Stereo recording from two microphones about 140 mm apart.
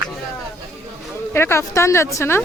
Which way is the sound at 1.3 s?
20° left (ahead or behind).